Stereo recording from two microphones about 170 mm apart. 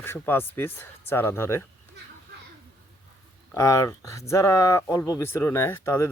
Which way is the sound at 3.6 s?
20° left (ahead or behind).